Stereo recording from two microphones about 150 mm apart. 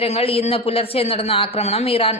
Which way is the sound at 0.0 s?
40° left (ahead or behind).